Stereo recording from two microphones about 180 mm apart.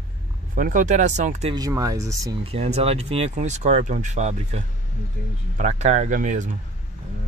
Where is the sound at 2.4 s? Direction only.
35° right (ahead or behind).